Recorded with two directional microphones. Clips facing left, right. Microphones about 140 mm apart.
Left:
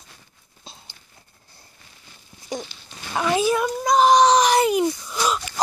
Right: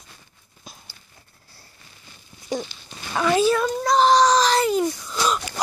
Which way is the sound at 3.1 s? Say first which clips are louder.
Right 2 dB; 15° left (ahead or behind).